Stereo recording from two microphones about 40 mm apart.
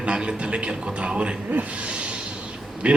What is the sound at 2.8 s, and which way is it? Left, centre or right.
Speech, right.